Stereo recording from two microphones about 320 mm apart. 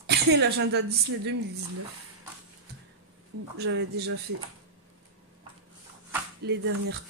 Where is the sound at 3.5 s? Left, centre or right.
Right.